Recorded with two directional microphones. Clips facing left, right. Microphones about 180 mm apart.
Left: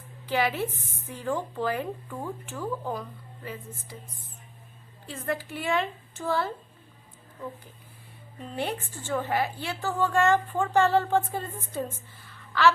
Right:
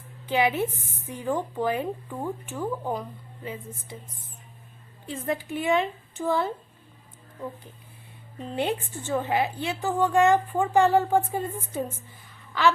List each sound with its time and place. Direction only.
0.3 s speech: 20° right (ahead or behind)
5.0 s speech: 20° right (ahead or behind)
8.5 s a woman's voice: 20° right (ahead or behind)
12.3 s a sound: 15° right (ahead or behind)